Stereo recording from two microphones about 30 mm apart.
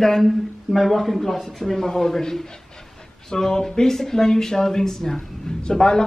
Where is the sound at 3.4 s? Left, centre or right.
Centre.